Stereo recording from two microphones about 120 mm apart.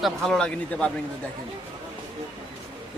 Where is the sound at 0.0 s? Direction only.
Centre (ahead or behind).